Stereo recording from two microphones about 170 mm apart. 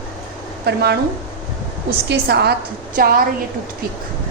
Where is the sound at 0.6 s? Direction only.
70° right (ahead or behind).